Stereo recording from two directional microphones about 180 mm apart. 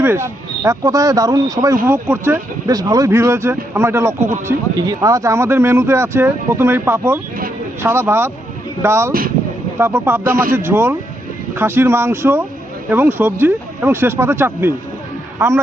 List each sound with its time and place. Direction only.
0.0 s speech: 15° right (ahead or behind)